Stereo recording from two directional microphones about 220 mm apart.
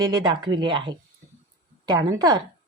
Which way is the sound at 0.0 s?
20° right (ahead or behind).